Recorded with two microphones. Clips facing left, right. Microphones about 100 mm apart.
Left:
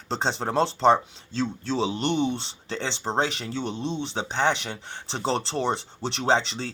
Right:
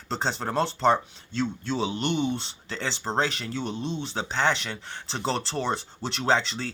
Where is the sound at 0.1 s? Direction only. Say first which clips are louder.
Left 2 dB; 25° left (ahead or behind).